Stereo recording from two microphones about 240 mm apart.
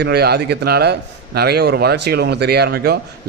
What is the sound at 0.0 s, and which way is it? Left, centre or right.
A man's voice, right.